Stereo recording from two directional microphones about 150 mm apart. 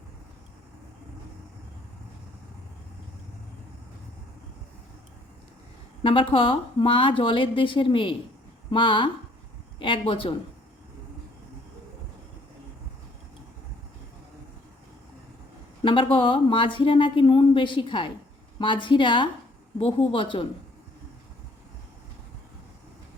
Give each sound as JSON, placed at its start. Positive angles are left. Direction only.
{"t": 6.0, "sound": "a woman's voice", "side_deg": 35}
{"t": 15.8, "sound": "speech", "side_deg": 35}